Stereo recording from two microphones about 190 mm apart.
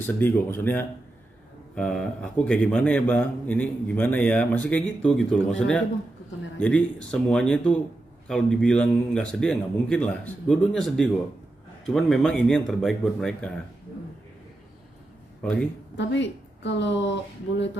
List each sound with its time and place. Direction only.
0.0 s a man's voice: 10° left (ahead or behind)
16.0 s a woman's voice: 70° left (ahead or behind)